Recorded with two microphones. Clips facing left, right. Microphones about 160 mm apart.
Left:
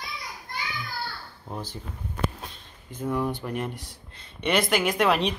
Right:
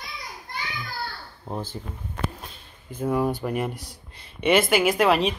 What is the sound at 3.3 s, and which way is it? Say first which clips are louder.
Speech: right 4 dB; 10° right (ahead or behind).